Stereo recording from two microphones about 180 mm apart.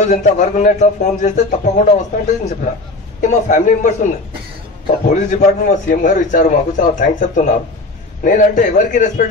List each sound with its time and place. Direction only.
0.0 s a man's voice: 40° left (ahead or behind)
5.1 s a man's voice: 45° left (ahead or behind)